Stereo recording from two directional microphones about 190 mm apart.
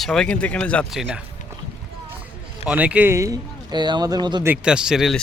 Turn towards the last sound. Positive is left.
turn(degrees=0)  # may be behind; listen again after turning